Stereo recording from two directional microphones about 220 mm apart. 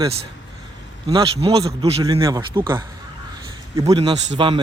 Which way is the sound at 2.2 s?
15° right (ahead or behind).